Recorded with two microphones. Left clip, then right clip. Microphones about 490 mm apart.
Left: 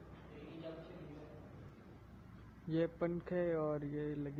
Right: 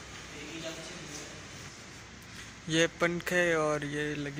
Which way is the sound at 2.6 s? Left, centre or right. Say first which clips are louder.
Right 10 dB; left.